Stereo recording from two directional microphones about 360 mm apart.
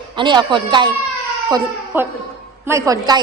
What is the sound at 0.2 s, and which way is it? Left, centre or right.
A woman's voice, centre.